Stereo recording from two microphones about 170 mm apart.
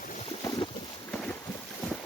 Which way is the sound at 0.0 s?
50° left (ahead or behind).